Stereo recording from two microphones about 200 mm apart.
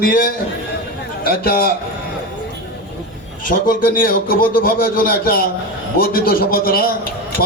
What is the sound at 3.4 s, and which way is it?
Speech, 45° left (ahead or behind).